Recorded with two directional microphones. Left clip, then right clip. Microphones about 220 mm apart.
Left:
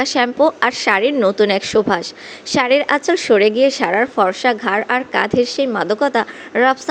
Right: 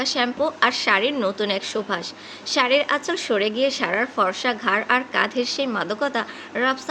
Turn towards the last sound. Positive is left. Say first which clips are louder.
# left 8 dB
turn(degrees=30)  # may be behind; listen again after turning